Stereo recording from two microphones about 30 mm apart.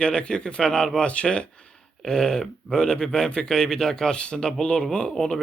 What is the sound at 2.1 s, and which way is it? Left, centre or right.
Speech, left.